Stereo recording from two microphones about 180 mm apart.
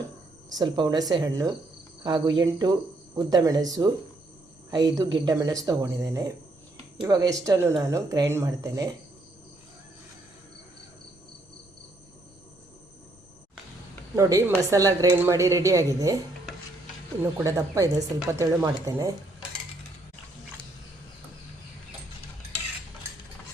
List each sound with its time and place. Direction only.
0.5 s speech: 25° right (ahead or behind)
14.2 s a woman's voice: 15° right (ahead or behind)
17.3 s a woman's voice: 15° right (ahead or behind)